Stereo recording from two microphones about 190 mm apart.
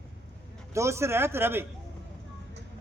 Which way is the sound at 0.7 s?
15° right (ahead or behind).